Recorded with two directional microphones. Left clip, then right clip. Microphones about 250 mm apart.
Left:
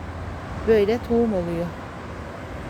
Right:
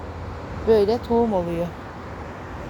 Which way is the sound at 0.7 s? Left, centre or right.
Centre.